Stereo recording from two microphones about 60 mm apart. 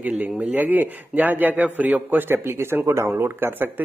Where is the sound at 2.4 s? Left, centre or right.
Right.